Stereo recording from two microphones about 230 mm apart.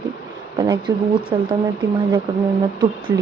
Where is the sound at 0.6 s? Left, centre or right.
Centre.